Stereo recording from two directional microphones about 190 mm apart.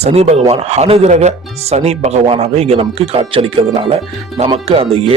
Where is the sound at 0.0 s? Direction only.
35° right (ahead or behind).